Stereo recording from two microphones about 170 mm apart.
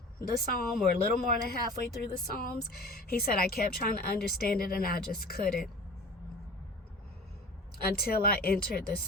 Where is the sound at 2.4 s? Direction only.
65° left (ahead or behind).